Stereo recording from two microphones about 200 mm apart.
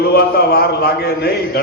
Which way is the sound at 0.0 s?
50° left (ahead or behind).